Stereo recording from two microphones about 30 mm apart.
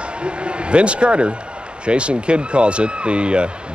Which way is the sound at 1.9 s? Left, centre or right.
Right.